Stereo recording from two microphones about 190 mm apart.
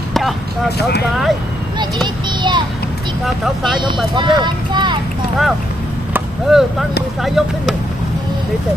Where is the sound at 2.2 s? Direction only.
25° right (ahead or behind).